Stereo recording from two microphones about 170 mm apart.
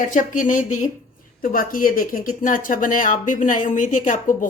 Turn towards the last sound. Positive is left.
turn(degrees=50)  # may be behind; listen again after turning